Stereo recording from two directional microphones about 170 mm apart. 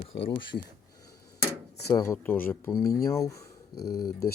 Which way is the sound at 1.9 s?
20° left (ahead or behind).